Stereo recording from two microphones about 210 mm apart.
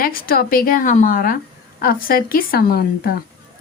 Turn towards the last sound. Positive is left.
turn(degrees=45)  # may be behind; listen again after turning